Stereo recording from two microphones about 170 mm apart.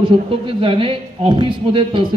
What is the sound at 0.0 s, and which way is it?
A man's voice, 30° right (ahead or behind).